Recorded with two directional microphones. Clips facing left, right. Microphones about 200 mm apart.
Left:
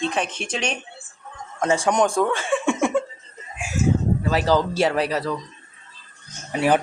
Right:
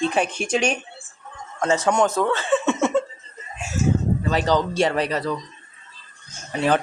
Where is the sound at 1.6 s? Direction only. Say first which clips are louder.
Even; 15° left (ahead or behind).